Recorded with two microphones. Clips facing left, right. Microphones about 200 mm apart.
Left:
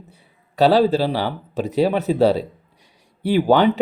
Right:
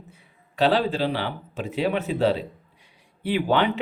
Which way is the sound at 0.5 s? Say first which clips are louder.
Left 6 dB; 40° left (ahead or behind).